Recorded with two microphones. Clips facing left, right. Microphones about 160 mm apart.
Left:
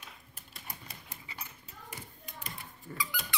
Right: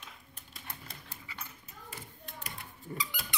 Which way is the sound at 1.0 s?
25° left (ahead or behind).